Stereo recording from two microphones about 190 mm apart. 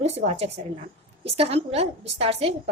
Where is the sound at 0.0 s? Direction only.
35° right (ahead or behind).